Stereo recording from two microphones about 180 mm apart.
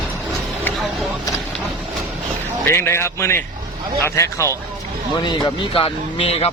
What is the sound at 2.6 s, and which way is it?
A man's voice, 15° left (ahead or behind).